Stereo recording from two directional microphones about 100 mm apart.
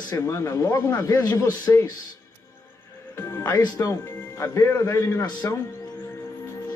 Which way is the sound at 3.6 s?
35° left (ahead or behind).